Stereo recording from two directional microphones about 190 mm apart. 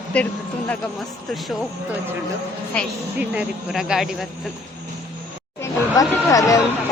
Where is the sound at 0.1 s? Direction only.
5° left (ahead or behind).